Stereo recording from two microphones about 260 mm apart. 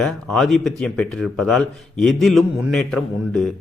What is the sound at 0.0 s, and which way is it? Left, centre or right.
Speech, centre.